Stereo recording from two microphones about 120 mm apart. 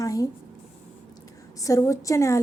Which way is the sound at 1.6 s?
25° left (ahead or behind).